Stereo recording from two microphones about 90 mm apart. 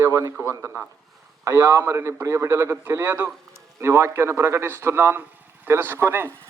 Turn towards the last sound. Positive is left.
turn(degrees=-25)  # may be behind; listen again after turning